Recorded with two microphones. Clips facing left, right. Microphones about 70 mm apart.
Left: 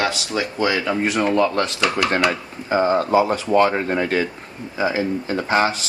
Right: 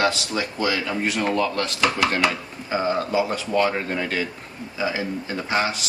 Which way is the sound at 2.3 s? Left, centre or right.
Left.